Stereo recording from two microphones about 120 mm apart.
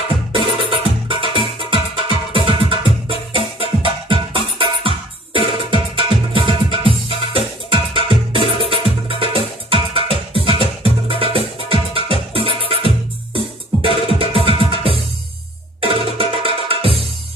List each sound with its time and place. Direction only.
0.7 s music: 45° right (ahead or behind)